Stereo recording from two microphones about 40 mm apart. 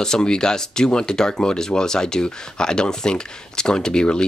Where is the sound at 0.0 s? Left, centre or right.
Centre.